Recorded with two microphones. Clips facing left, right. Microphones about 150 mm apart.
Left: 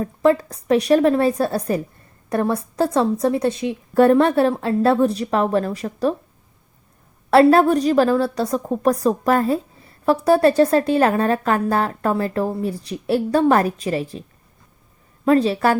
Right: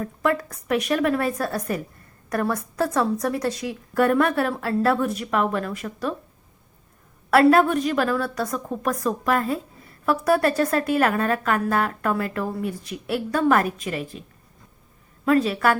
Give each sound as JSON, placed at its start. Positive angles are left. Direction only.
{"t": 0.0, "sound": "a woman's voice", "side_deg": 30}
{"t": 7.3, "sound": "a woman's voice", "side_deg": 30}